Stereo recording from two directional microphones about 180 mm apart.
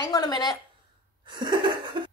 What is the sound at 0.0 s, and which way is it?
Speech, 20° left (ahead or behind).